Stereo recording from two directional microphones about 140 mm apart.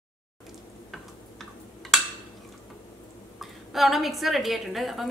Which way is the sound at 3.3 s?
Centre (ahead or behind).